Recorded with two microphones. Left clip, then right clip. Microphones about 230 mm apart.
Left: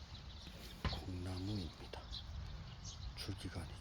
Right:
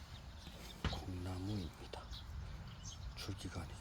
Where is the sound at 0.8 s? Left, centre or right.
Right.